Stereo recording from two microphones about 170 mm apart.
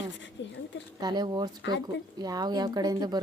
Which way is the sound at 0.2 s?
90° left.